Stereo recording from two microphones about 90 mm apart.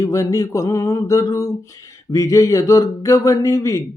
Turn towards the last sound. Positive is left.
turn(degrees=40)  # may be behind; listen again after turning